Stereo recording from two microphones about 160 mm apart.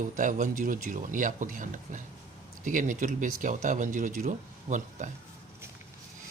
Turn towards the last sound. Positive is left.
turn(degrees=-50)  # may be behind; listen again after turning